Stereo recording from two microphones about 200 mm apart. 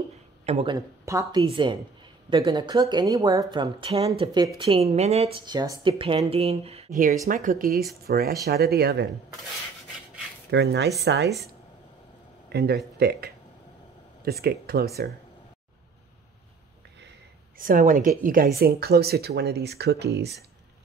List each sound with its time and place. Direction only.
0.5 s speech: 30° right (ahead or behind)
0.7 s speech: 15° right (ahead or behind); by 5.4 s 30° right (ahead or behind)
5.4 s speech: 20° right (ahead or behind)
6.9 s speech: 45° right (ahead or behind)
7.7 s speech: centre (ahead or behind)
8.1 s speech: 50° right (ahead or behind)
10.5 s speech: 60° right (ahead or behind)
12.5 s speech: 55° right (ahead or behind)
14.4 s speech: 50° right (ahead or behind)
17.6 s speech: 45° right (ahead or behind)